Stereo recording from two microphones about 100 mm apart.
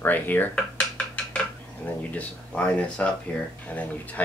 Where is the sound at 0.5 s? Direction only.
10° left (ahead or behind).